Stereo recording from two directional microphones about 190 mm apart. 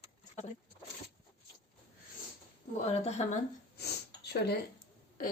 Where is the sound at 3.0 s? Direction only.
35° left (ahead or behind).